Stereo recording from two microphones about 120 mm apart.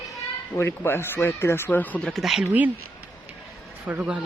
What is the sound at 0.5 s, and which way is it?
Speech, 20° left (ahead or behind).